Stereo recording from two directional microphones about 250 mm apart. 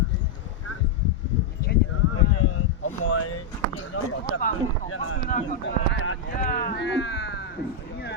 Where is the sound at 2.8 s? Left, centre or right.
Left.